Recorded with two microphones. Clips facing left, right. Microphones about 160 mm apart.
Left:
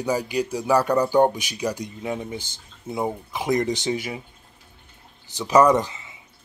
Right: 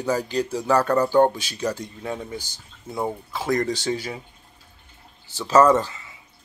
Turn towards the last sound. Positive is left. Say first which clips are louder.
# even
turn(degrees=15)  # may be behind; listen again after turning